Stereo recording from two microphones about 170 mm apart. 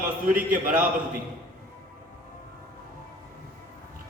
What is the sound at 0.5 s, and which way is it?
Speech, 50° right (ahead or behind).